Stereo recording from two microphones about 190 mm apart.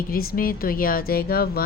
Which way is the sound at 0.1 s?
50° left (ahead or behind).